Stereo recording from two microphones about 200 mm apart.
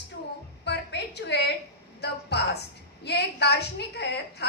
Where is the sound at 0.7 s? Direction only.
55° left (ahead or behind).